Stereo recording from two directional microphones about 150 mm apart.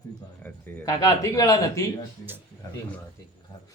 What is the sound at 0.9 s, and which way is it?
Speech, 25° left (ahead or behind).